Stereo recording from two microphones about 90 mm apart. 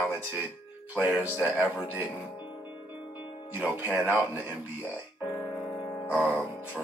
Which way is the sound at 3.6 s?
20° right (ahead or behind).